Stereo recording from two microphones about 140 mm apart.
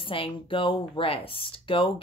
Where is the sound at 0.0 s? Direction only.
40° left (ahead or behind).